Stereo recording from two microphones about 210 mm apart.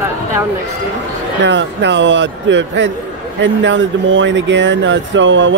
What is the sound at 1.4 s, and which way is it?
Speech, 60° right (ahead or behind).